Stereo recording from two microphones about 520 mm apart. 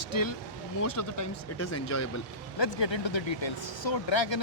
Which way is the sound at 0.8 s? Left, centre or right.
Left.